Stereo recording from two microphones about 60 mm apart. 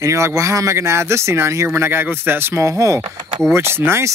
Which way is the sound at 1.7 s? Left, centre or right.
Right.